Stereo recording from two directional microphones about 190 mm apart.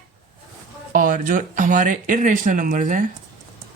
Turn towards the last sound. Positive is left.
turn(degrees=-45)  # may be behind; listen again after turning